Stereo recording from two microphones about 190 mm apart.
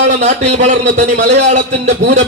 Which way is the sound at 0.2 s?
35° right (ahead or behind).